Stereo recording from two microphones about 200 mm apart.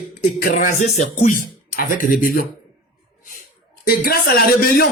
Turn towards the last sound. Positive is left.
turn(degrees=50)  # may be behind; listen again after turning